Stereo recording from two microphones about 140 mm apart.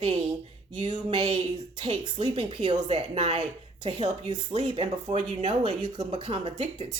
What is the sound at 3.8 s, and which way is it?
Speech, 50° right (ahead or behind).